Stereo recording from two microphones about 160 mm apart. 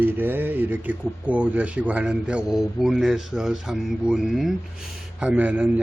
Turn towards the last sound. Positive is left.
turn(degrees=-10)  # may be behind; listen again after turning